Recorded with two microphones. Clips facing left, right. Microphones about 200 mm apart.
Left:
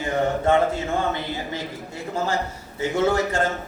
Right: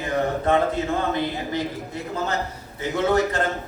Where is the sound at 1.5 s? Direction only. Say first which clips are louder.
Right 4 dB; 30° left (ahead or behind).